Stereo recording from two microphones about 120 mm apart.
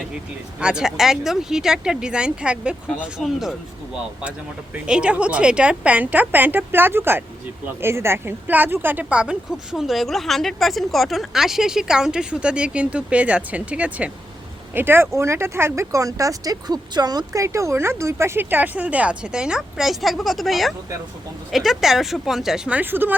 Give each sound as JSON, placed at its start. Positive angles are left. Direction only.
{"t": 0.6, "sound": "a woman's voice", "side_deg": -5}